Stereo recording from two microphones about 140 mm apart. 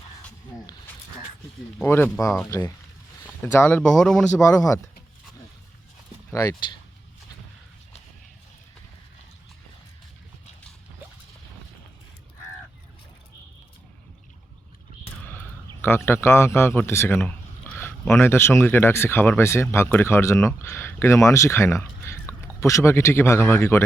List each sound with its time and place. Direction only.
1.8 s speech: 15° left (ahead or behind)
4.4 s speech: 25° left (ahead or behind)
6.3 s speech: 20° left (ahead or behind)
15.3 s a man's voice: 15° left (ahead or behind)